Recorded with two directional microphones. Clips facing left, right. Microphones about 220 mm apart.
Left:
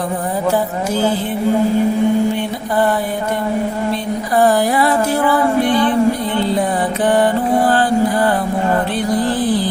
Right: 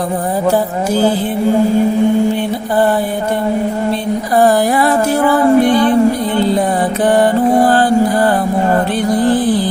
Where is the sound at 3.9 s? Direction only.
40° right (ahead or behind).